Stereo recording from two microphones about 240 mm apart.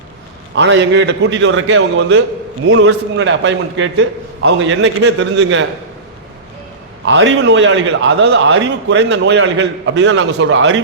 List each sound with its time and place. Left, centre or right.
0.5 s a man's voice: right
7.0 s a man's voice: right